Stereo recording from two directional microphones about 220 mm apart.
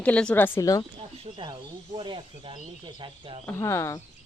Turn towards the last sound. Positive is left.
turn(degrees=15)  # may be behind; listen again after turning